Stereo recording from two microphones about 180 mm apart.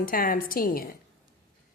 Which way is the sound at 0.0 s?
50° left (ahead or behind).